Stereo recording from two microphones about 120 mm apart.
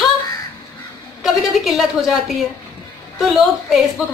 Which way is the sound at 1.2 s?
Centre (ahead or behind).